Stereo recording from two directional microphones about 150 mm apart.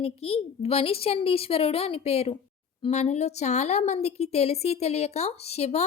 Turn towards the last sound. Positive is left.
turn(degrees=45)  # may be behind; listen again after turning